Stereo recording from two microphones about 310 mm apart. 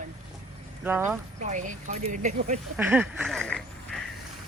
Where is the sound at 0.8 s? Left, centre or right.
Centre.